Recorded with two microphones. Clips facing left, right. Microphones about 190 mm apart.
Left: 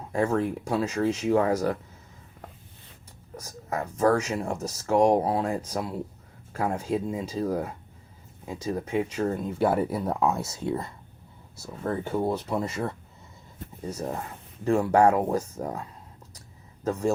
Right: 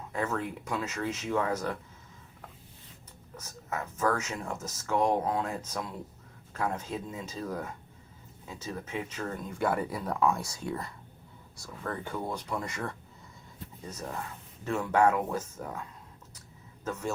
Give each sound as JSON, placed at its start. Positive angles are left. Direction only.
{"t": 0.1, "sound": "speech", "side_deg": 35}
{"t": 3.4, "sound": "speech", "side_deg": 35}
{"t": 16.8, "sound": "speech", "side_deg": 35}